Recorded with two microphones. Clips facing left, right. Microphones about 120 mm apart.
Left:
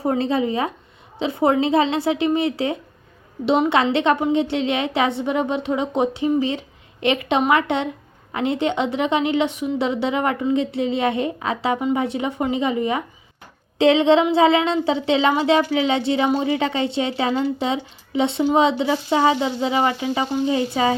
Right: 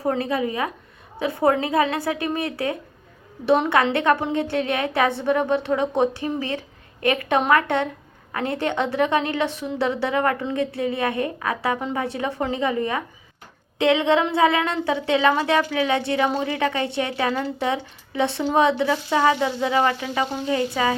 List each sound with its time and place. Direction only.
0.0 s speech: 25° left (ahead or behind)
3.9 s speech: 20° left (ahead or behind)